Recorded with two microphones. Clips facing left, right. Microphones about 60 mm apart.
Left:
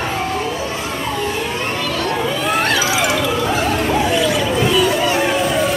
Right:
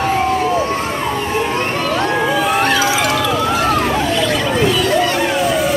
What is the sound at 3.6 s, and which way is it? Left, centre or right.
Vehicle, right.